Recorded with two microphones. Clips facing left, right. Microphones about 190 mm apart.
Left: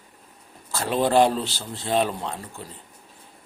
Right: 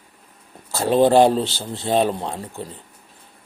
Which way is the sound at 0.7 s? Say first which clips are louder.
Right 6 dB; 30° right (ahead or behind).